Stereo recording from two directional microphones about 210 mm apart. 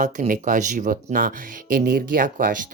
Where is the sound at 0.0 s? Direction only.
35° right (ahead or behind).